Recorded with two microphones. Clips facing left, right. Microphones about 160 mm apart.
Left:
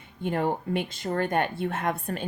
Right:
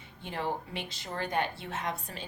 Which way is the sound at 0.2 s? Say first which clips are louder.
Left 8 dB; 50° left (ahead or behind).